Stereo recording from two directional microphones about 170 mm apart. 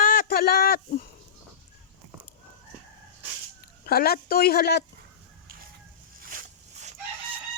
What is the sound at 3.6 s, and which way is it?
Speech, 65° left (ahead or behind).